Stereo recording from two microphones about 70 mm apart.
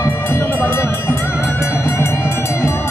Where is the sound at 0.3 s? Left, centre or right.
Left.